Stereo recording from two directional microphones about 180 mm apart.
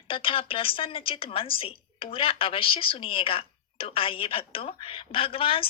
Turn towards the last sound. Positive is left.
turn(degrees=30)  # may be behind; listen again after turning